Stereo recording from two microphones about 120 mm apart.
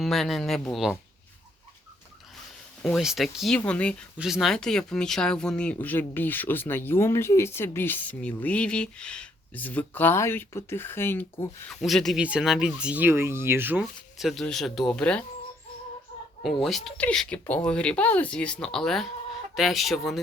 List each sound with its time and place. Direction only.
0.0 s speech: centre (ahead or behind)
2.9 s speech: 5° right (ahead or behind)
4.2 s speech: 5° right (ahead or behind); by 11.4 s 20° left (ahead or behind)
11.7 s speech: centre (ahead or behind); by 13.8 s 15° right (ahead or behind)
14.2 s speech: centre (ahead or behind)
16.4 s speech: centre (ahead or behind)